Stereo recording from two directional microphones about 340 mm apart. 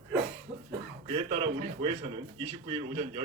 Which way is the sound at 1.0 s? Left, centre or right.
Centre.